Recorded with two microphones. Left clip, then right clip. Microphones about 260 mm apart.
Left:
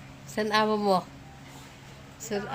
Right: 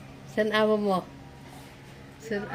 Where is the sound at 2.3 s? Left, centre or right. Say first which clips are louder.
Even; left.